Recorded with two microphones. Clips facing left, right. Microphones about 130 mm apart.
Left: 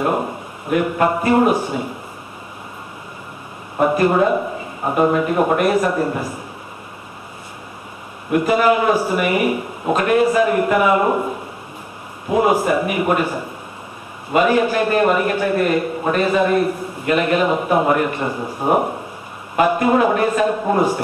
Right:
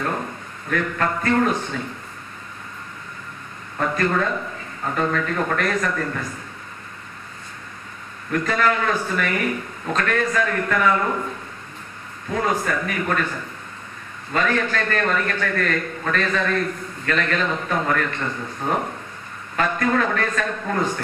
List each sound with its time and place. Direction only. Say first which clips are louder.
0.7 s a man's voice: left 6 dB; 15° left (ahead or behind)
3.7 s a man's voice: left 7 dB; 15° left (ahead or behind)
8.3 s a man's voice: left 6 dB; 10° left (ahead or behind)